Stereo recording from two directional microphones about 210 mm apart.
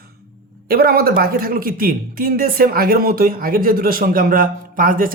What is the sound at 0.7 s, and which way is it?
A man's voice, 45° right (ahead or behind).